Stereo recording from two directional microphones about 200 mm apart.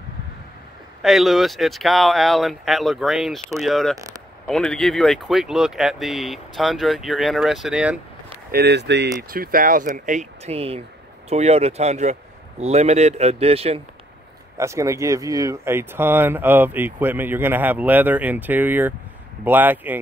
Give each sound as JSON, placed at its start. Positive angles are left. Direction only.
{"t": 1.0, "sound": "speech", "side_deg": 0}
{"t": 8.5, "sound": "speech", "side_deg": -55}
{"t": 14.6, "sound": "speech", "side_deg": -15}